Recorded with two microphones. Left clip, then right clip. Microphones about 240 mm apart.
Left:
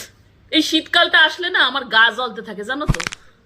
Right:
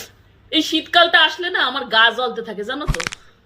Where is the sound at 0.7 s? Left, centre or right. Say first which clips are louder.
Right 3 dB; right.